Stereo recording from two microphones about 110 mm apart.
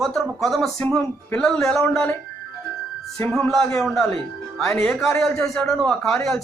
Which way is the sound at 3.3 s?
5° left (ahead or behind).